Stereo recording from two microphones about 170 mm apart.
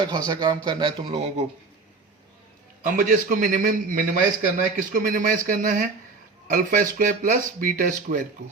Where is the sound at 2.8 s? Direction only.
50° right (ahead or behind).